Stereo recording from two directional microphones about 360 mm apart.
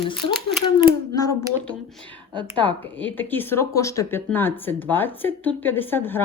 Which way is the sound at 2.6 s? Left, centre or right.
Centre.